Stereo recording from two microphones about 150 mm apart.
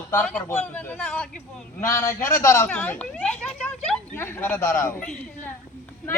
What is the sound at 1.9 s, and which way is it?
Speech, 15° left (ahead or behind).